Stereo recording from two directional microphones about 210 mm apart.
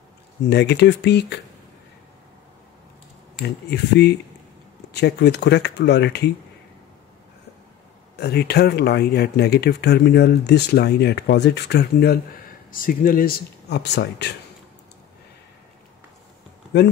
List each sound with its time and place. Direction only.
0.5 s speech: 55° left (ahead or behind)
3.4 s speech: 50° left (ahead or behind)
8.2 s speech: 50° left (ahead or behind)